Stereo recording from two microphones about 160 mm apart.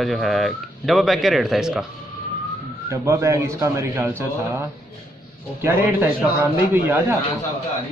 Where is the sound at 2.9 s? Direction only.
20° right (ahead or behind).